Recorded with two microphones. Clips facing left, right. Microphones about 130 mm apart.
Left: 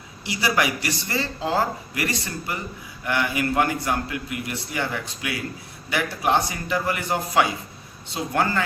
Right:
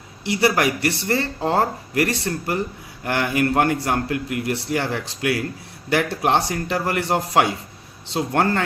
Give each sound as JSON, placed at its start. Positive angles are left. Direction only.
{"t": 0.3, "sound": "speech", "side_deg": -60}